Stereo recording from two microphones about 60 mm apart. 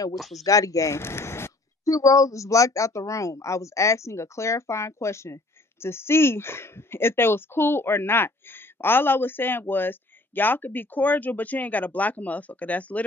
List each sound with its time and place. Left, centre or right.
0.1 s speech: centre
0.4 s speech: left
1.9 s speech: left